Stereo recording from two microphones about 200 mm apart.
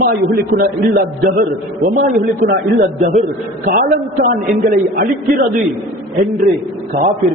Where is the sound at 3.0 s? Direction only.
40° right (ahead or behind).